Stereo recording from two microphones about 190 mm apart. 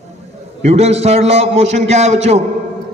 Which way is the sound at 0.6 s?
35° right (ahead or behind).